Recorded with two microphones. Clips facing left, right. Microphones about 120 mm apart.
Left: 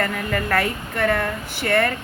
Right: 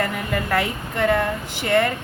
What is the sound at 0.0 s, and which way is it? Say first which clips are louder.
Speech: even; 15° right (ahead or behind).